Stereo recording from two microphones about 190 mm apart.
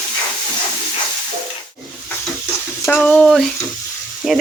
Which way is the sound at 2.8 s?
10° left (ahead or behind).